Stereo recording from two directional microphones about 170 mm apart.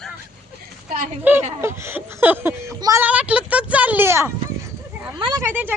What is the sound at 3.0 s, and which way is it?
Speech, 5° right (ahead or behind).